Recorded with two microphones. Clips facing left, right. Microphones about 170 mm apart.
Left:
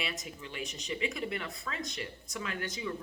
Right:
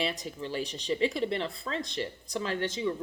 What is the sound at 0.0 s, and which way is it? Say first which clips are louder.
Speech: right 7 dB; 30° right (ahead or behind).